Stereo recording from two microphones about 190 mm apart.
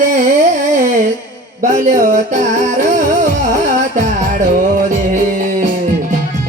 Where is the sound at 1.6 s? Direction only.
40° right (ahead or behind).